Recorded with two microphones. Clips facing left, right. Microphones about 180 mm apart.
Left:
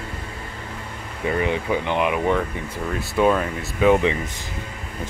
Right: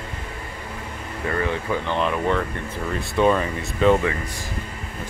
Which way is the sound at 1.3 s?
15° left (ahead or behind).